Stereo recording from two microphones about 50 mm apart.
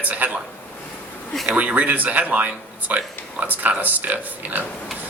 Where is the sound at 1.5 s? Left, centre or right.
Right.